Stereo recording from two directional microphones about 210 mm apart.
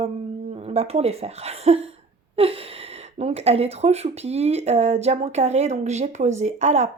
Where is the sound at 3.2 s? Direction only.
30° right (ahead or behind).